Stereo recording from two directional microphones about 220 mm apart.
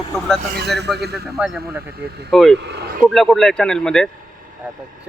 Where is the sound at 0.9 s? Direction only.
50° right (ahead or behind).